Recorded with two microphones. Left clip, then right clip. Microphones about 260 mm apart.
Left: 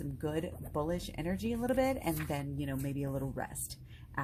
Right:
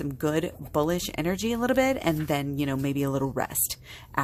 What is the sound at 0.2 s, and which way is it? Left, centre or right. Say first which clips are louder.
Speech: right 10 dB; right.